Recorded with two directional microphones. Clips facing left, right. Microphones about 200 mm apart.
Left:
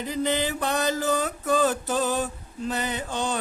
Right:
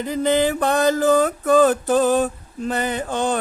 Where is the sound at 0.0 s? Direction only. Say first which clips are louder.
Right 7 dB; 50° right (ahead or behind).